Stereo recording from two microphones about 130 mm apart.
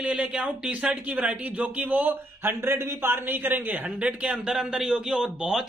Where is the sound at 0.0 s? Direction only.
10° right (ahead or behind).